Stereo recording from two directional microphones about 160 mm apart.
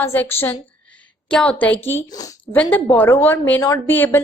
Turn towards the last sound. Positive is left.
turn(degrees=10)  # may be behind; listen again after turning